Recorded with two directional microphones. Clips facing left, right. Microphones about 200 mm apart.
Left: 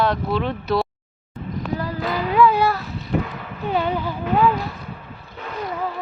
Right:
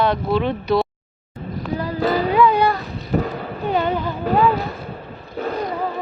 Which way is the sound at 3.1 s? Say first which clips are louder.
Right 3 dB; 40° right (ahead or behind).